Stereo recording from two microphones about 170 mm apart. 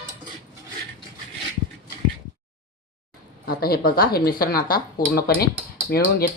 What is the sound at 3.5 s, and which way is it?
Speech, 65° left (ahead or behind).